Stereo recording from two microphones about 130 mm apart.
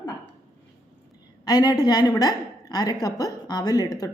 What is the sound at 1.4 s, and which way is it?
A woman's voice, 30° left (ahead or behind).